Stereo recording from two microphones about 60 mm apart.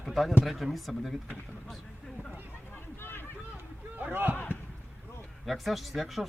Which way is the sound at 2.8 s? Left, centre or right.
Left.